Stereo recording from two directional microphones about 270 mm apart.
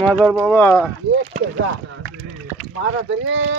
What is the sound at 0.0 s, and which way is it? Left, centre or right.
Speech, centre.